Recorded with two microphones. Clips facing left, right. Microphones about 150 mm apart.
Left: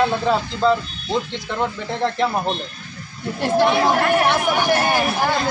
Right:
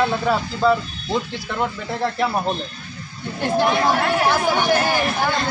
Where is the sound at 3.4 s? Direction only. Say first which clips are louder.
Left 2 dB; centre (ahead or behind).